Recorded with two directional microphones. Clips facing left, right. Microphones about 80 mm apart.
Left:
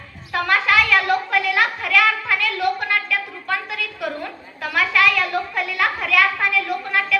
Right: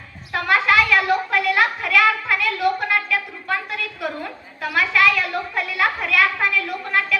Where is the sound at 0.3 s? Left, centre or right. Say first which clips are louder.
Right 1 dB; centre.